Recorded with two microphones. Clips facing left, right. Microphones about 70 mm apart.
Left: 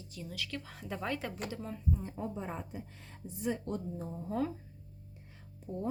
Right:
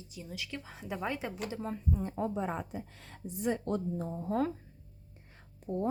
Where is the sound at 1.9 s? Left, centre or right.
Right.